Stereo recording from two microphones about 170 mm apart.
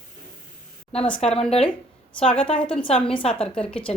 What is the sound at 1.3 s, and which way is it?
Speech, 35° left (ahead or behind).